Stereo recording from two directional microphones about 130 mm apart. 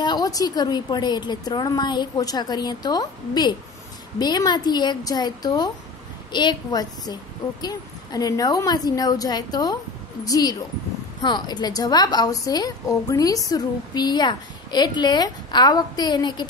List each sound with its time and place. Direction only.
0.0 s a woman's voice: 30° left (ahead or behind)